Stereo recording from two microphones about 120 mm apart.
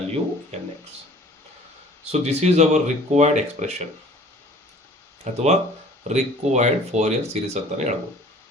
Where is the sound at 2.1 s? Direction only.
65° right (ahead or behind).